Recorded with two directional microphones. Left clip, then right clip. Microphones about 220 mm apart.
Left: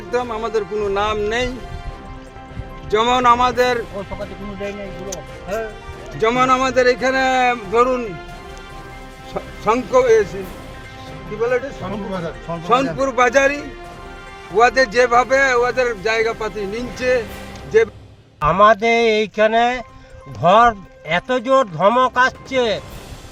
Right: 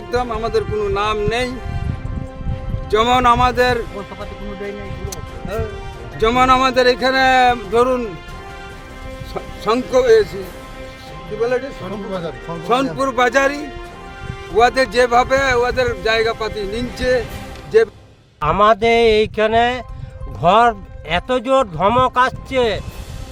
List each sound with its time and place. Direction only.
0.1 s speech: 25° right (ahead or behind)
2.9 s speech: 25° right (ahead or behind)
6.1 s speech: 30° right (ahead or behind)
9.3 s speech: 25° right (ahead or behind)
11.3 s speech: 30° right (ahead or behind)
18.3 s speech: 30° right (ahead or behind)